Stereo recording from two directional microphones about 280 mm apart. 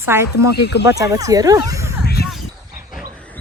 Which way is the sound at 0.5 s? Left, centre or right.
Left.